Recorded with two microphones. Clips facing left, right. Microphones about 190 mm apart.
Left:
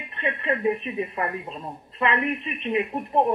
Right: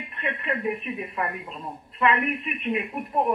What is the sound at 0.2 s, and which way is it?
Speech, 25° left (ahead or behind).